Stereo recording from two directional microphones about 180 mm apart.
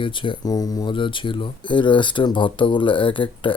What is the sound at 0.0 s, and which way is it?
Speech, 25° left (ahead or behind).